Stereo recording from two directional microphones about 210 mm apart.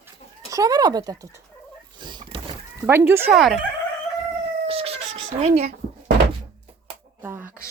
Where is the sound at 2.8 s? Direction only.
10° right (ahead or behind).